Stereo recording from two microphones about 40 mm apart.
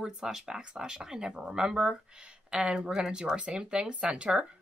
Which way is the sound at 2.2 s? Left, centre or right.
Right.